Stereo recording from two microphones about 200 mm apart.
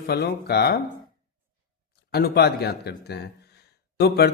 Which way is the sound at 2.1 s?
55° left (ahead or behind).